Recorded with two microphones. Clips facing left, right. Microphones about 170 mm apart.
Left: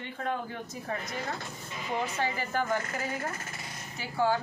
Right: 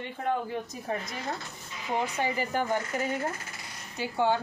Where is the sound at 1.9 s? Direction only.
15° right (ahead or behind).